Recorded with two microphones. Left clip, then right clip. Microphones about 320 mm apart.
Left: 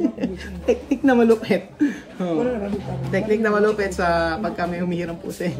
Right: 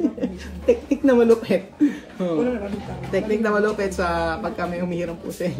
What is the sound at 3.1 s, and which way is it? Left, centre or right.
Speech, centre.